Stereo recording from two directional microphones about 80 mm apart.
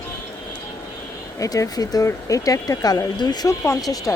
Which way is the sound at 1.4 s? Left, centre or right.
Left.